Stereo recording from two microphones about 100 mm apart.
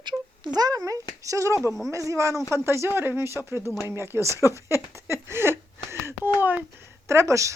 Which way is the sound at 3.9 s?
25° right (ahead or behind).